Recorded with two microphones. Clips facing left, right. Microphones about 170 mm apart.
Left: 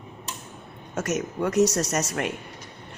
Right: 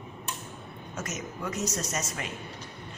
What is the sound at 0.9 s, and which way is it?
Speech, 70° left (ahead or behind).